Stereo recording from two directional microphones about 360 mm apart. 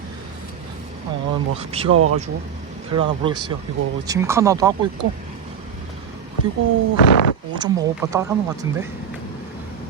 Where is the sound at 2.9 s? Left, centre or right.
Centre.